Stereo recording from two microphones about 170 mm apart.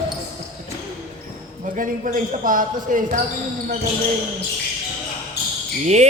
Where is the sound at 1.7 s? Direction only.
50° right (ahead or behind).